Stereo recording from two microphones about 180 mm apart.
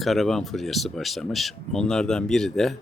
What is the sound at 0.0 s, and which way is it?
Speech, centre (ahead or behind).